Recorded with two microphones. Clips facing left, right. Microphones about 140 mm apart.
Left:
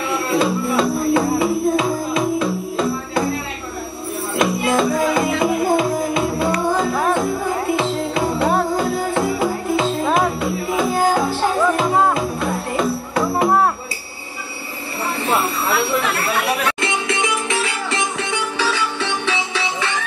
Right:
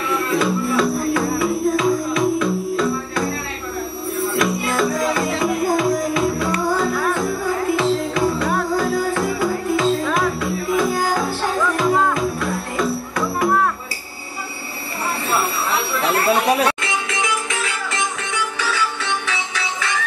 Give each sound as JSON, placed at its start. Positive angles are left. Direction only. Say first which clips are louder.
{"t": 0.1, "sound": "music", "louder": "left 1 dB", "side_deg": 25}
{"t": 4.4, "sound": "music", "louder": "left 4 dB", "side_deg": 25}
{"t": 16.8, "sound": "music", "louder": "left 3 dB", "side_deg": 30}